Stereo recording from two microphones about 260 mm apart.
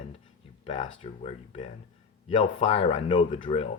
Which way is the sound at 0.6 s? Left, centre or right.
Left.